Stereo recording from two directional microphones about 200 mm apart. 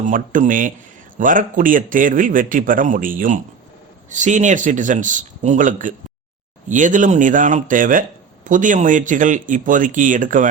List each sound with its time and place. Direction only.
0.0 s a man's voice: 40° right (ahead or behind)